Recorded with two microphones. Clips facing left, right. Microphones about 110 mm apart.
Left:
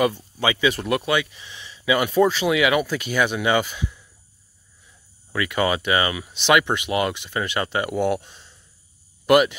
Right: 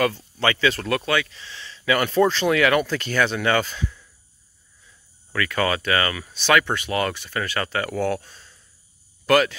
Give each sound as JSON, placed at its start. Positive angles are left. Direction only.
{"t": 0.0, "sound": "speech", "side_deg": 15}
{"t": 5.3, "sound": "speech", "side_deg": 15}